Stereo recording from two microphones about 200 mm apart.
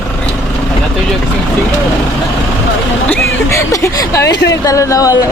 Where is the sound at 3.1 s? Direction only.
15° left (ahead or behind).